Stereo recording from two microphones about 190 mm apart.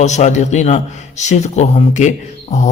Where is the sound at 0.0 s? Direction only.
35° left (ahead or behind).